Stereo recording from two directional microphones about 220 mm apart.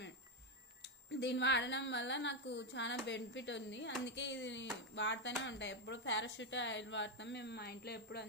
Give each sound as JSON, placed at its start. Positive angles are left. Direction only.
{"t": 0.8, "sound": "a woman's voice", "side_deg": 50}